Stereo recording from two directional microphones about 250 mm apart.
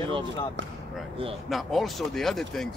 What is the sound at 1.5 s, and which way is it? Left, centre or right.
Speech, centre.